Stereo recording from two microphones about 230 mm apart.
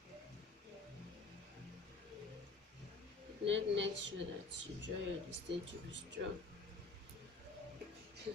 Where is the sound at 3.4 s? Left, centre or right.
Right.